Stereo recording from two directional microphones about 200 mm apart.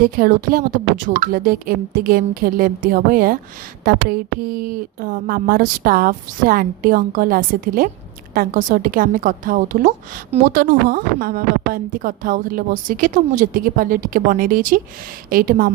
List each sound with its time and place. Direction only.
0.0 s a woman's voice: 45° right (ahead or behind)